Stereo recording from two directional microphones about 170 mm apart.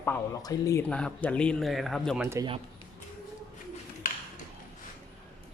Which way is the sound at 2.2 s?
15° right (ahead or behind).